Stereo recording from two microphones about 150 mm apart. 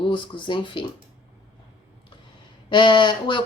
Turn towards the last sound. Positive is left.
turn(degrees=30)  # may be behind; listen again after turning